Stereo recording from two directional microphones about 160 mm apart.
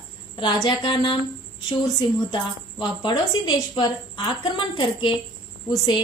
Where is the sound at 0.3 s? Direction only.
30° left (ahead or behind).